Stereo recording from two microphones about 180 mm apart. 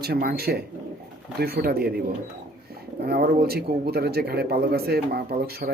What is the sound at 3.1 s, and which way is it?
A man's voice, 60° right (ahead or behind).